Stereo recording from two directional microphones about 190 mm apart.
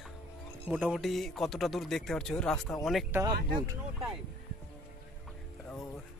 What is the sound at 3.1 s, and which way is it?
Speech, 15° right (ahead or behind).